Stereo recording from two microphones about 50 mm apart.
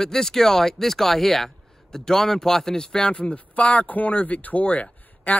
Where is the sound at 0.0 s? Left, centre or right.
Centre.